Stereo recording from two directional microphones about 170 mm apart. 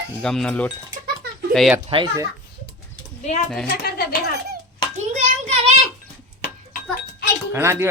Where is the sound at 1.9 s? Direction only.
25° right (ahead or behind).